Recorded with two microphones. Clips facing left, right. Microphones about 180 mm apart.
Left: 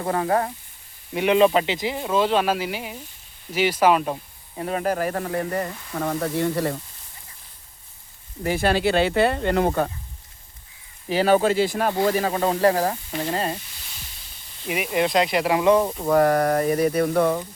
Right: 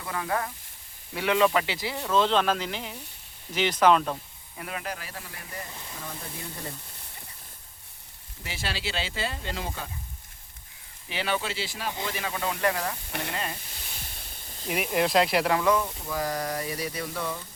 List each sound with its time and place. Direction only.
0.0 s speech: 40° left (ahead or behind)
1.1 s speech: 20° left (ahead or behind)
4.5 s speech: 35° left (ahead or behind); by 6.7 s 75° left (ahead or behind)
8.4 s speech: 50° left (ahead or behind)
11.1 s speech: 40° left (ahead or behind)
12.0 s speech: 40° left (ahead or behind)
14.7 s speech: centre (ahead or behind)
15.9 s speech: 60° left (ahead or behind)